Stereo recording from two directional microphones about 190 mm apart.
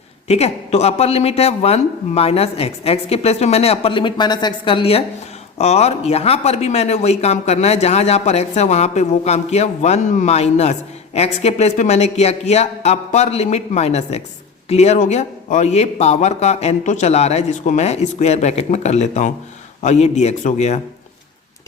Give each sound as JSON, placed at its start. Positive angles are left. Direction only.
{"t": 0.3, "sound": "speech", "side_deg": 35}